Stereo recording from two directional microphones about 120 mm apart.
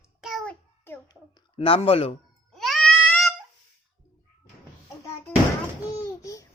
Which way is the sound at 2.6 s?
Centre (ahead or behind).